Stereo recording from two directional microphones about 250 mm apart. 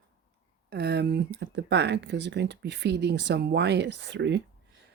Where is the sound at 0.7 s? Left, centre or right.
Right.